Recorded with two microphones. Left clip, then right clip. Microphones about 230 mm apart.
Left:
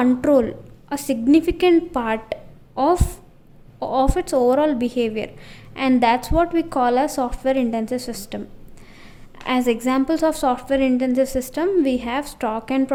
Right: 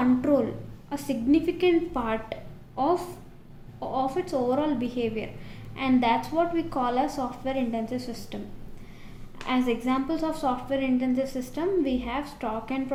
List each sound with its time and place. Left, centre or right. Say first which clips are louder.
0.0 s a woman's voice: left 7 dB; left
9.5 s a woman's voice: left 6 dB; left